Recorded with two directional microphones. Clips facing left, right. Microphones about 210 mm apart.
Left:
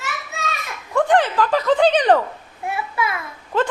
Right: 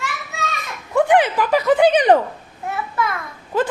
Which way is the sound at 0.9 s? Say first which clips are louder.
Right 2 dB; 10° right (ahead or behind).